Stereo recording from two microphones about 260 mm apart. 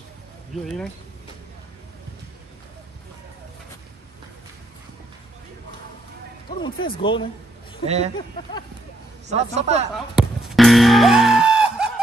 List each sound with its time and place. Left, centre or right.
6.6 s speech: centre
7.8 s a man's voice: right
9.3 s a man's voice: right
10.1 s music: centre